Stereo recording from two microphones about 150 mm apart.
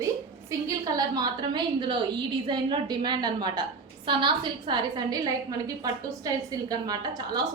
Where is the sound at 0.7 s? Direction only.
25° right (ahead or behind).